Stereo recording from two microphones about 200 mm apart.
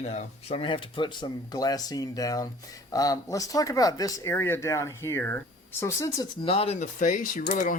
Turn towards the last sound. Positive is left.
turn(degrees=40)  # may be behind; listen again after turning